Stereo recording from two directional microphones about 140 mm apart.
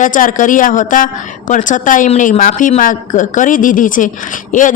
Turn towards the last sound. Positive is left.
turn(degrees=70)  # may be behind; listen again after turning